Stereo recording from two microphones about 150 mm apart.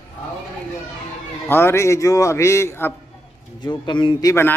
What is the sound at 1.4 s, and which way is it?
A man's voice, 15° left (ahead or behind).